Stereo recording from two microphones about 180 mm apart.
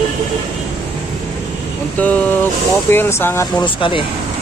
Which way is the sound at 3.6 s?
30° left (ahead or behind).